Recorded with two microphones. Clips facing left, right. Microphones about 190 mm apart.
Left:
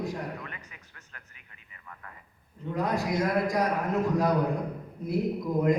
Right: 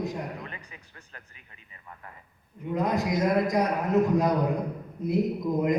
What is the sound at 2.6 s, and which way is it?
A man's voice, 20° right (ahead or behind).